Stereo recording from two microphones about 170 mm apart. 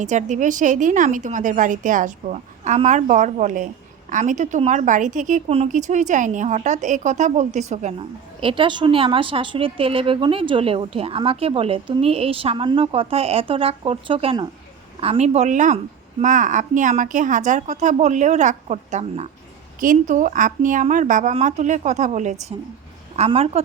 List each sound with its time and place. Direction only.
0.0 s a woman's voice: 45° right (ahead or behind)